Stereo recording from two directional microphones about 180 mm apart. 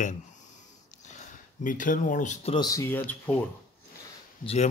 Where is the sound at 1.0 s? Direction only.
40° left (ahead or behind).